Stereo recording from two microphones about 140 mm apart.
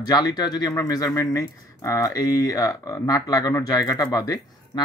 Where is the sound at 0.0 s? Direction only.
30° left (ahead or behind).